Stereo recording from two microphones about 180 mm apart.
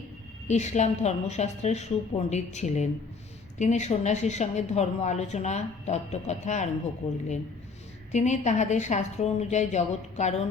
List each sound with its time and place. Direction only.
0.4 s speech: 40° left (ahead or behind)
8.1 s speech: 40° left (ahead or behind)